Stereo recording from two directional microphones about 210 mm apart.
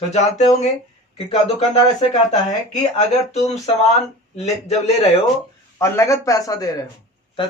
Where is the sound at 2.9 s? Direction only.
30° left (ahead or behind).